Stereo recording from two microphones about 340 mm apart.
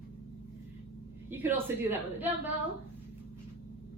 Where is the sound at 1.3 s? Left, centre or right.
Centre.